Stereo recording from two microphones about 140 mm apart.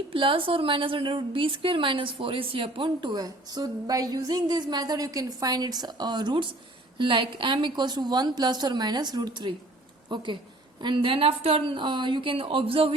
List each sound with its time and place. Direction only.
0.1 s a woman's voice: 40° right (ahead or behind)